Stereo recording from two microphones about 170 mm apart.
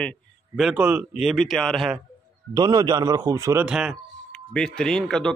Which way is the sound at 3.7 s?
5° right (ahead or behind).